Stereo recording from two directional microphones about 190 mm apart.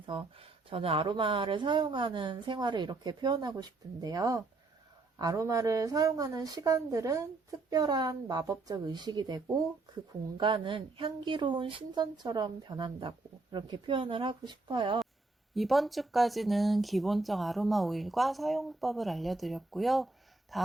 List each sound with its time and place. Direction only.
0.0 s a woman's voice: 25° right (ahead or behind)
15.5 s speech: centre (ahead or behind)